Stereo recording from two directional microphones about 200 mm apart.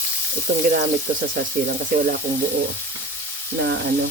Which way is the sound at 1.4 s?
40° right (ahead or behind).